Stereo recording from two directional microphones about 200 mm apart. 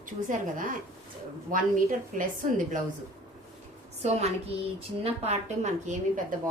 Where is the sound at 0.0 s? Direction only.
40° right (ahead or behind).